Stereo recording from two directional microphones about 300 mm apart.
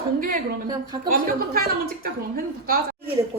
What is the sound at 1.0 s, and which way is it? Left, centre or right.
A woman's voice, right.